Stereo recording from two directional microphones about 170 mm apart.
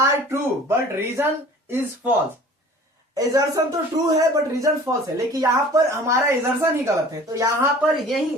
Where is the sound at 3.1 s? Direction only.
20° right (ahead or behind).